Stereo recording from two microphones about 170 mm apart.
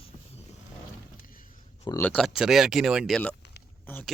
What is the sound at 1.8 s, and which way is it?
Speech, 15° left (ahead or behind).